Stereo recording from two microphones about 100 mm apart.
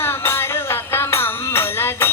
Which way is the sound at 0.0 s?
25° left (ahead or behind).